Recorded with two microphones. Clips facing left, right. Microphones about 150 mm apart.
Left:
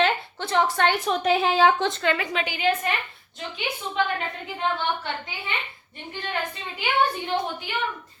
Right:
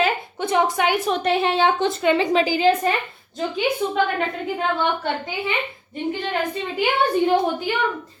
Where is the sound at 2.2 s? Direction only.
35° right (ahead or behind).